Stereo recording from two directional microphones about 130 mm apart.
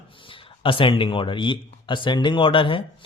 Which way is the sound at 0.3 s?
40° left (ahead or behind).